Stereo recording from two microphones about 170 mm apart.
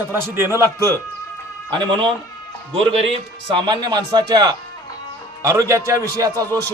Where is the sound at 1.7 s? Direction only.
30° right (ahead or behind).